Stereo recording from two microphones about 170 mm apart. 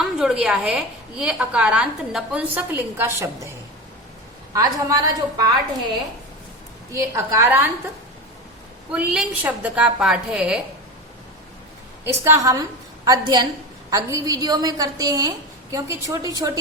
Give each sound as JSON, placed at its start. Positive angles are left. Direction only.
{"t": 0.2, "sound": "a woman's voice", "side_deg": -5}
{"t": 4.5, "sound": "a woman's voice", "side_deg": -20}
{"t": 6.9, "sound": "a woman's voice", "side_deg": -20}
{"t": 8.9, "sound": "a woman's voice", "side_deg": -5}
{"t": 12.0, "sound": "a woman's voice", "side_deg": -15}